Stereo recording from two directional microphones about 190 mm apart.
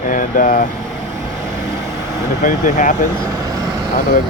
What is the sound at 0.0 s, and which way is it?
Vehicle, 45° left (ahead or behind).